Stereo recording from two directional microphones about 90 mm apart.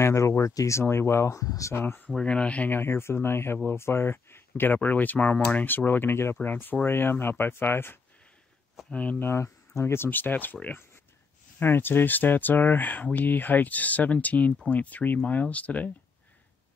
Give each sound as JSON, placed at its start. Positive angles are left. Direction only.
{"t": 0.0, "sound": "speech", "side_deg": 30}
{"t": 2.0, "sound": "speech", "side_deg": 10}
{"t": 9.3, "sound": "speech", "side_deg": 30}